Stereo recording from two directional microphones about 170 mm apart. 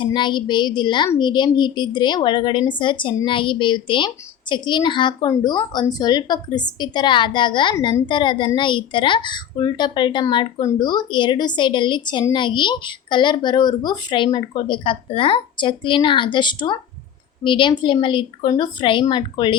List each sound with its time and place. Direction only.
0.0 s a woman's voice: 25° left (ahead or behind)